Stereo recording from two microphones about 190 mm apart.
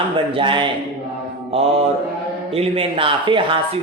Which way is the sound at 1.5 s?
30° right (ahead or behind).